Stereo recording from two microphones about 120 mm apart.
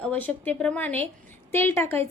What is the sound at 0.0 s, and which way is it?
A woman's voice, 10° left (ahead or behind).